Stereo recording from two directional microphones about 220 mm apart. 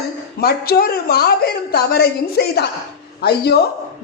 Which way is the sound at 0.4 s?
45° left (ahead or behind).